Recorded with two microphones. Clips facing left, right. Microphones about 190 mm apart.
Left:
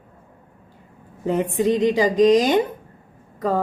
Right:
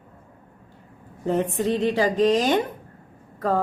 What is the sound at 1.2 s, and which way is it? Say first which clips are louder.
Speech: left 3 dB; 10° left (ahead or behind).